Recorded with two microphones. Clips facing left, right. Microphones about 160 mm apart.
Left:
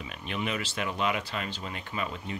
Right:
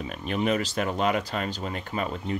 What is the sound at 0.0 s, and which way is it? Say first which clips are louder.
Speech: right 7 dB; 40° right (ahead or behind).